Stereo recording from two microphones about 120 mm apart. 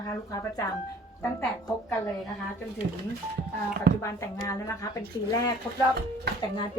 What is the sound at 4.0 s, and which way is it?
Speech, 25° left (ahead or behind).